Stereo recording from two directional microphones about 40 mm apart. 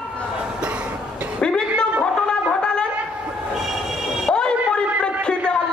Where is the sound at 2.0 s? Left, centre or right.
Left.